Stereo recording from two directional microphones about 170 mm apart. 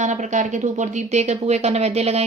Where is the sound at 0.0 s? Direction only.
45° right (ahead or behind).